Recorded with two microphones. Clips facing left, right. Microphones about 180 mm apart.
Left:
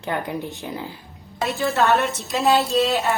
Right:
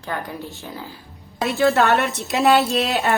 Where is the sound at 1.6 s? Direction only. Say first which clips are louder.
Right 3 dB; 85° right.